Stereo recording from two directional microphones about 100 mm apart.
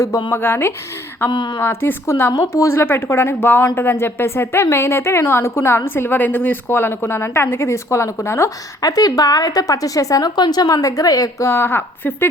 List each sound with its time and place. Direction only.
0.3 s a woman's voice: 20° left (ahead or behind)
1.3 s speech: 50° left (ahead or behind)
1.6 s a woman's voice: 20° left (ahead or behind); by 11.4 s 35° left (ahead or behind)
11.4 s a woman's voice: 25° left (ahead or behind)